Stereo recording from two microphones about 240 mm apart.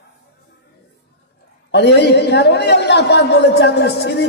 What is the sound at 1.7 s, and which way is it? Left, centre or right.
A man's voice, left.